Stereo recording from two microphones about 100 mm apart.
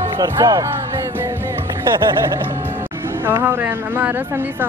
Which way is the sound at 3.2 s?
20° right (ahead or behind).